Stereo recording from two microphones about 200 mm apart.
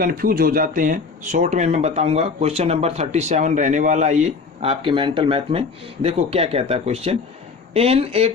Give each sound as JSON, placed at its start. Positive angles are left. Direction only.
{"t": 0.0, "sound": "speech", "side_deg": -45}